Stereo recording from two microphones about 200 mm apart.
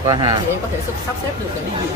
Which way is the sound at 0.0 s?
20° right (ahead or behind).